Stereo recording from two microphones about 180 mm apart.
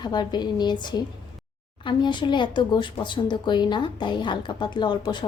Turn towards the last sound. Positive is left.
turn(degrees=25)  # may be behind; listen again after turning